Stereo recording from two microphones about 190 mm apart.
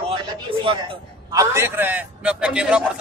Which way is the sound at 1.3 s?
15° right (ahead or behind).